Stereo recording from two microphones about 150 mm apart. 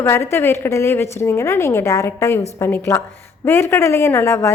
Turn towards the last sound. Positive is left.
turn(degrees=15)  # may be behind; listen again after turning